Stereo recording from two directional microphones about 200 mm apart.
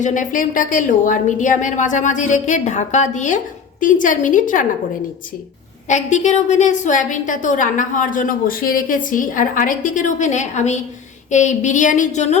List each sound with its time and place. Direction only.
0.0 s a woman's voice: 40° left (ahead or behind)
5.9 s a woman's voice: 35° left (ahead or behind)